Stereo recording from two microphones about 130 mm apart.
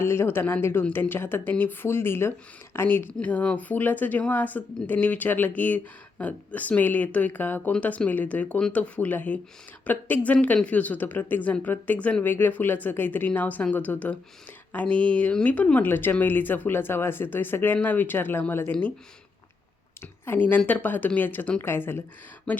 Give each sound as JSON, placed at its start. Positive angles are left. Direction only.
{"t": 0.0, "sound": "speech", "side_deg": 20}
{"t": 20.0, "sound": "speech", "side_deg": 15}